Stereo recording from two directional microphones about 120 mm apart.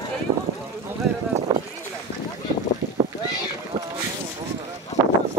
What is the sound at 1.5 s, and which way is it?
Clip-clop, 35° right (ahead or behind).